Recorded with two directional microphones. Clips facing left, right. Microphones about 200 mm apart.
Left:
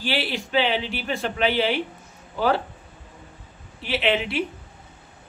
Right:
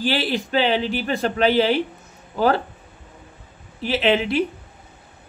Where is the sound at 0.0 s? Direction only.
40° right (ahead or behind).